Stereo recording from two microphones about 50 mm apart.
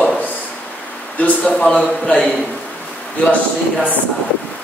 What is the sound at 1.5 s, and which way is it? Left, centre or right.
Speech, centre.